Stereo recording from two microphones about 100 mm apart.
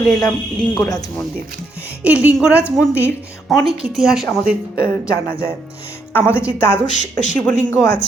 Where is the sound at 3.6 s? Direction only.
65° right (ahead or behind).